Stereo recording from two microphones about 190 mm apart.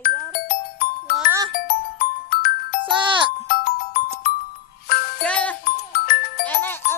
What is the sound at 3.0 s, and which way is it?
Speech, 25° right (ahead or behind).